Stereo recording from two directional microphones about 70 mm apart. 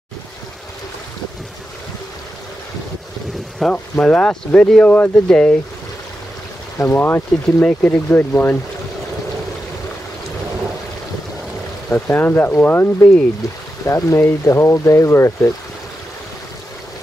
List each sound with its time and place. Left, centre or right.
3.5 s speech: centre
6.8 s speech: left
7.6 s speech: left
11.9 s speech: left
13.8 s speech: left